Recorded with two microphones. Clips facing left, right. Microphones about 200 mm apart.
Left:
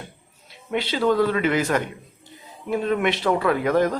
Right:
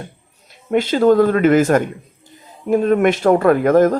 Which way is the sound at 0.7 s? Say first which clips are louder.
Right 8 dB; 45° right (ahead or behind).